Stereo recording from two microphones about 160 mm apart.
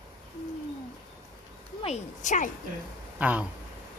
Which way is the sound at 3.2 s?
10° right (ahead or behind).